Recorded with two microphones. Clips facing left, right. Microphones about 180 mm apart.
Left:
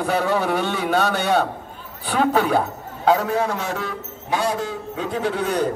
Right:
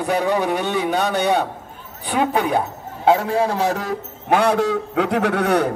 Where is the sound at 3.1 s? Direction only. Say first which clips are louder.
Right 2 dB; 30° right (ahead or behind).